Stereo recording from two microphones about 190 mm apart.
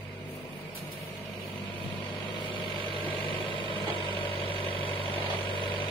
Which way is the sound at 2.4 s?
25° left (ahead or behind).